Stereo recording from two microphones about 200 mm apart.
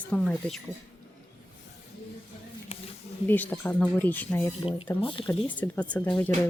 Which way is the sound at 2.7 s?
35° left (ahead or behind).